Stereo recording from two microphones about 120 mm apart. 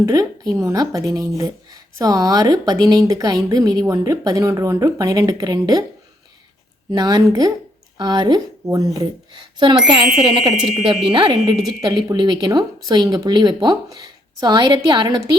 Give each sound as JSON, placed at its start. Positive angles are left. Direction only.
{"t": 0.0, "sound": "speech", "side_deg": -30}
{"t": 6.9, "sound": "speech", "side_deg": -35}